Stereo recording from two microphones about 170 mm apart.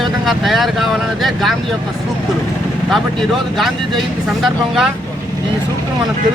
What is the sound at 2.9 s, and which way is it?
Speech, centre (ahead or behind).